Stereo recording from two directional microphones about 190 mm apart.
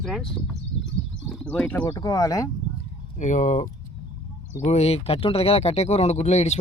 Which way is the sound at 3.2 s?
40° left (ahead or behind).